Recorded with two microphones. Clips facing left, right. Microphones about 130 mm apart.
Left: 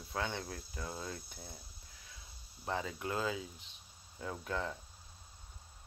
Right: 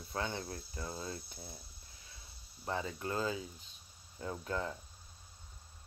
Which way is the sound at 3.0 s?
10° left (ahead or behind).